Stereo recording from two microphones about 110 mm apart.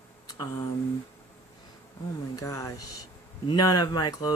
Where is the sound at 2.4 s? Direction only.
30° left (ahead or behind).